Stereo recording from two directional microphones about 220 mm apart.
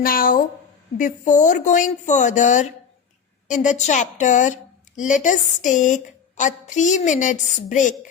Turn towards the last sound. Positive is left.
turn(degrees=35)  # may be behind; listen again after turning